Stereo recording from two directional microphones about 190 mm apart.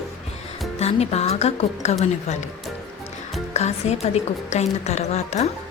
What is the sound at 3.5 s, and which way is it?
A woman's voice, 35° left (ahead or behind).